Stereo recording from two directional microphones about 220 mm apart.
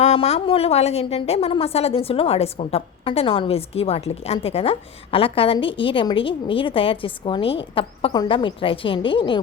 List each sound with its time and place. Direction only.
0.0 s a woman's voice: 30° left (ahead or behind)